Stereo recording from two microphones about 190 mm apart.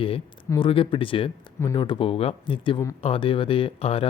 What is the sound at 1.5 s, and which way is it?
Speech, 20° left (ahead or behind).